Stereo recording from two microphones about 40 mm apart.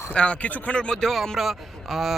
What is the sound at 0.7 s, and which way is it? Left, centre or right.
Speech, left.